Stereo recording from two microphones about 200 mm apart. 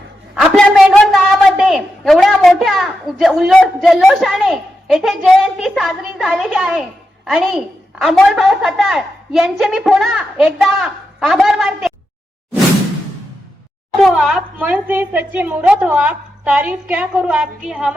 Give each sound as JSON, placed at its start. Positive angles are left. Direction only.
{"t": 0.3, "sound": "a sound", "side_deg": 0}
{"t": 0.9, "sound": "a woman's voice", "side_deg": 5}
{"t": 14.0, "sound": "a woman's voice", "side_deg": 0}